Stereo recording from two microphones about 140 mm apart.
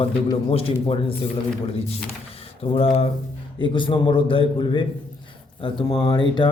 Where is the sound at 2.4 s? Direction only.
45° left (ahead or behind).